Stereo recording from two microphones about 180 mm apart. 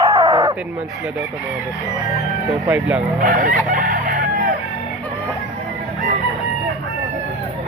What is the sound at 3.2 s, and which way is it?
Chicken, 50° right (ahead or behind).